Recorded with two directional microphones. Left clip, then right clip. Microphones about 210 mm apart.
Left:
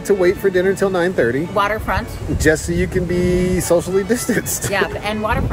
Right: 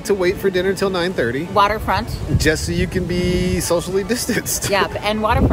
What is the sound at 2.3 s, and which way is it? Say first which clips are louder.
Speech: left 2 dB; centre (ahead or behind).